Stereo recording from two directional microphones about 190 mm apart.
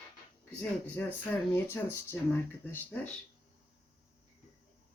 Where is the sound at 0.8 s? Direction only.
10° left (ahead or behind).